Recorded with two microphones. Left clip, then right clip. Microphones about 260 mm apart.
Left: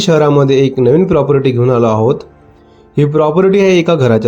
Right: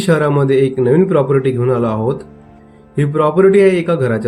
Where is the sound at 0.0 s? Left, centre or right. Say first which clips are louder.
Left 4 dB; centre.